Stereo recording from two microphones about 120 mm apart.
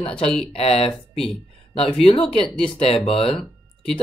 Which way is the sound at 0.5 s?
55° left (ahead or behind).